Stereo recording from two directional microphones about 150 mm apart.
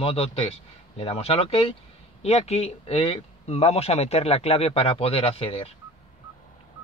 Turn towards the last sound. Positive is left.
turn(degrees=40)  # may be behind; listen again after turning